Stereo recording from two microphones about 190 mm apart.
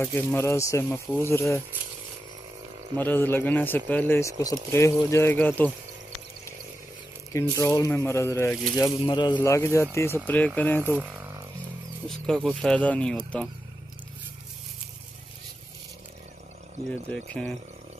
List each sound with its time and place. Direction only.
0.0 s speech: 10° left (ahead or behind)
3.0 s speech: 10° left (ahead or behind)
7.3 s speech: 15° left (ahead or behind)
11.0 s speech: 5° right (ahead or behind)
17.1 s speech: 5° left (ahead or behind)